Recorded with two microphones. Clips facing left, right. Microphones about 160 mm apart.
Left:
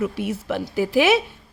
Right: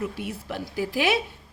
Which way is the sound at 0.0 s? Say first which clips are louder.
Left 6 dB; 90° left.